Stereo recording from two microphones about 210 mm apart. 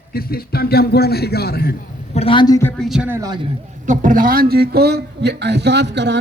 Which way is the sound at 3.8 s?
40° right (ahead or behind).